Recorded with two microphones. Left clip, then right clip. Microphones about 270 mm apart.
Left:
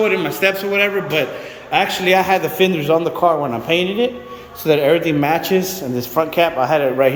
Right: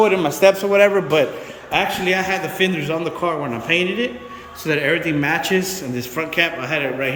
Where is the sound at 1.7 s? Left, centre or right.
Centre.